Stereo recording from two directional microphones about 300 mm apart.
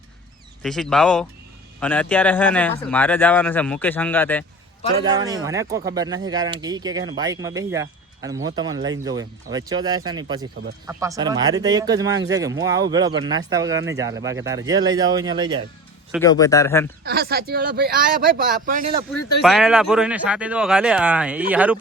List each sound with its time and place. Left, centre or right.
0.6 s speech: centre
5.2 s speech: centre
16.2 s a man's voice: centre
17.0 s speech: right
19.4 s speech: centre